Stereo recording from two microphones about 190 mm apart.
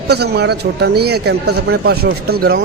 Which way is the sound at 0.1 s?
60° right (ahead or behind).